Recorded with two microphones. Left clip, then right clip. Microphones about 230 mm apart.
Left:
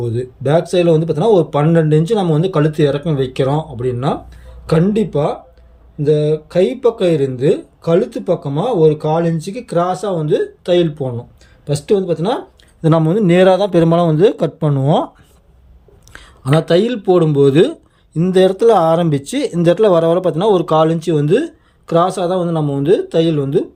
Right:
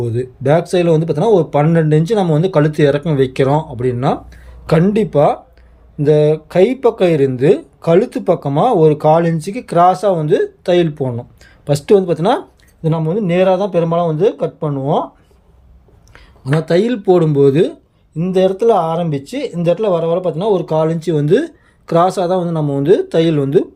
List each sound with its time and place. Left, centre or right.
0.0 s speech: centre
12.8 s a man's voice: left
16.4 s speech: centre
18.2 s a man's voice: left; by 23.6 s centre